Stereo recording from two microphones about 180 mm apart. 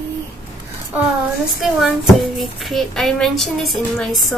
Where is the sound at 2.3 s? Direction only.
Centre (ahead or behind).